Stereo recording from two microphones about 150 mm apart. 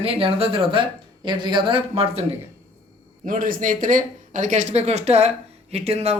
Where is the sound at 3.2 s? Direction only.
65° right (ahead or behind).